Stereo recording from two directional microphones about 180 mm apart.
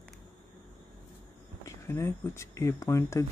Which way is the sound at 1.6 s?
15° left (ahead or behind).